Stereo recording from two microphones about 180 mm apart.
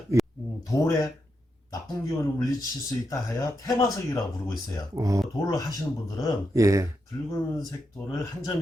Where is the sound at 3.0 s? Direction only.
20° left (ahead or behind).